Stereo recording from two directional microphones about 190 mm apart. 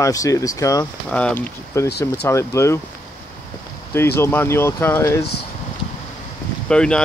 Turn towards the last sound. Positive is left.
turn(degrees=5)  # may be behind; listen again after turning